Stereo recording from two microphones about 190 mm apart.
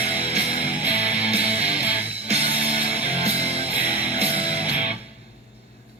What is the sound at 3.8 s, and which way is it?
Music, 10° right (ahead or behind).